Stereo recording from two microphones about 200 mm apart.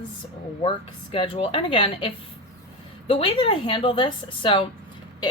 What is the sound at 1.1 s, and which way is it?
A woman's voice, 25° left (ahead or behind).